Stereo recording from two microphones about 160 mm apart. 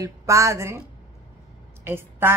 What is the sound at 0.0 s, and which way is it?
Speech, 20° right (ahead or behind).